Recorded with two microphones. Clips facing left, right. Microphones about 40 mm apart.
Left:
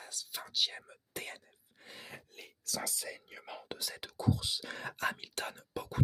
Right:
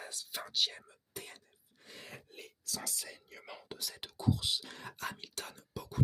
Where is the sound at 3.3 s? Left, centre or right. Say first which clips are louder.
Left 3 dB; centre.